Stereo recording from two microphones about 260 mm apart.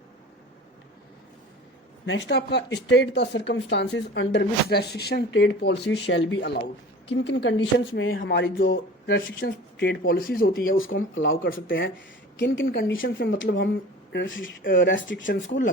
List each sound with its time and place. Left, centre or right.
2.0 s speech: left
10.7 s speech: left